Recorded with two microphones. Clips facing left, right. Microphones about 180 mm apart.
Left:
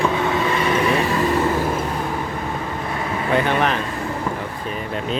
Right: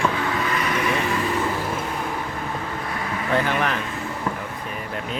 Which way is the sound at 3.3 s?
20° left (ahead or behind).